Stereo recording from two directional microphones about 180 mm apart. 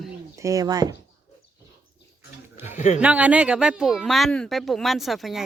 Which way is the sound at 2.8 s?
40° left (ahead or behind).